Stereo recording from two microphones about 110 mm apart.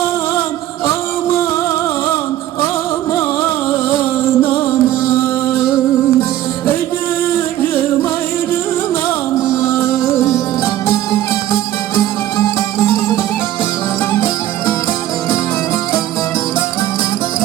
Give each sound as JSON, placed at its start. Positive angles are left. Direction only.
{"t": 4.4, "sound": "music", "side_deg": 20}
{"t": 9.5, "sound": "music", "side_deg": 25}